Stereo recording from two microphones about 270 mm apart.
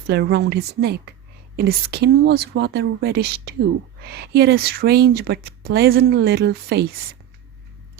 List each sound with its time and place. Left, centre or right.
0.1 s speech: right